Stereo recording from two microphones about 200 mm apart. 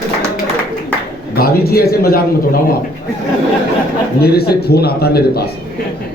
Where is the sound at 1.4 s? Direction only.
50° left (ahead or behind).